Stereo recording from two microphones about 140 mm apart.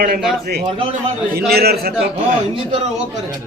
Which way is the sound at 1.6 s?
90° right.